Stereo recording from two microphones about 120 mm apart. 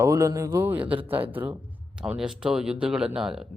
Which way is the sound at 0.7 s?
10° right (ahead or behind).